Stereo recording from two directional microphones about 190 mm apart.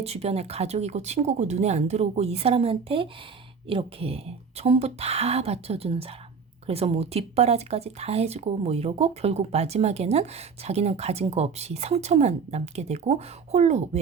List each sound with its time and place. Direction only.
0.0 s speech: 35° right (ahead or behind)